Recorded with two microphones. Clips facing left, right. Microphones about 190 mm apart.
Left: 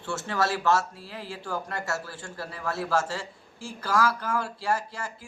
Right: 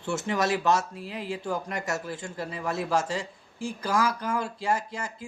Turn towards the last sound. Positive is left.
turn(degrees=-20)  # may be behind; listen again after turning